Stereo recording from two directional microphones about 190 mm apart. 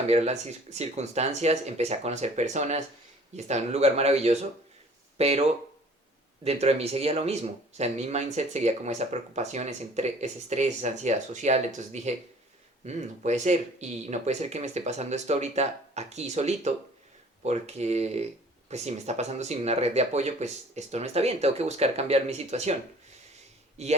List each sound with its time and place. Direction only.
0.1 s speech: 35° right (ahead or behind)